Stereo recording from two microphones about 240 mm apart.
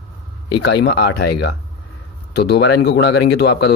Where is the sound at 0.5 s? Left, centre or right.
Left.